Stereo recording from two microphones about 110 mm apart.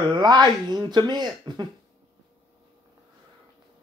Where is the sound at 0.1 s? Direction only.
40° right (ahead or behind).